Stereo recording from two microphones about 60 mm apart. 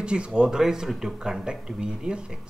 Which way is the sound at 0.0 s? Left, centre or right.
Centre.